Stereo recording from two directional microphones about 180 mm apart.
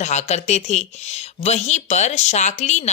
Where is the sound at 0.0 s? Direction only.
40° left (ahead or behind).